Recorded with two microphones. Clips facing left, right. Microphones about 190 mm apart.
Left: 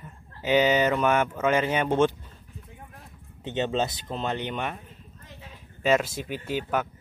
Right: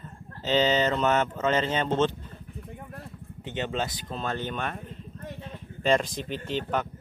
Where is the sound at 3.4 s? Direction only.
20° left (ahead or behind).